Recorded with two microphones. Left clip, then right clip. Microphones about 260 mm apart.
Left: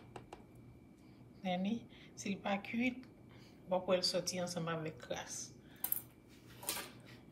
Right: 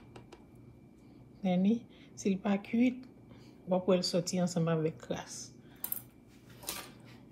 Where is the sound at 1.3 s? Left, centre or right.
Centre.